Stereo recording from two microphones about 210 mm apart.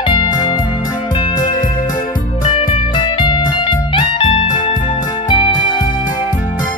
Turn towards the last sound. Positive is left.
turn(degrees=25)  # may be behind; listen again after turning